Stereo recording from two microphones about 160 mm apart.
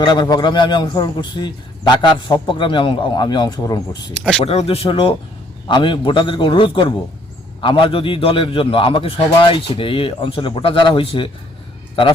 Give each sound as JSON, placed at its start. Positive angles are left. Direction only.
{"t": 0.0, "sound": "a man's voice", "side_deg": 25}
{"t": 4.4, "sound": "a man's voice", "side_deg": 40}